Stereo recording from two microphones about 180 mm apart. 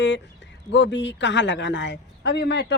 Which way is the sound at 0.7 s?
80° left.